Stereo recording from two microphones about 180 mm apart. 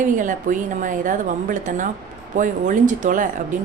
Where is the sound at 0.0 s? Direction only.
45° right (ahead or behind).